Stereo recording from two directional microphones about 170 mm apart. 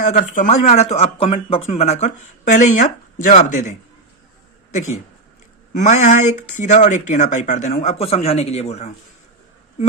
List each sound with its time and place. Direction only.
0.0 s speech: 45° left (ahead or behind)
5.7 s speech: 45° left (ahead or behind)